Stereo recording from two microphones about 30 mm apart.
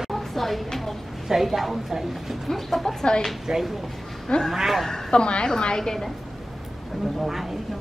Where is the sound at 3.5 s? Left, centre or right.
Right.